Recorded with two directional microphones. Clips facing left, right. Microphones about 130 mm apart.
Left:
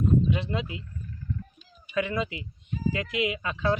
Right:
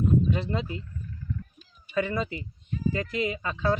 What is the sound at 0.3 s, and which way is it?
Speech, centre (ahead or behind).